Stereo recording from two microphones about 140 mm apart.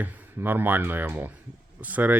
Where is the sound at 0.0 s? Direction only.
15° right (ahead or behind).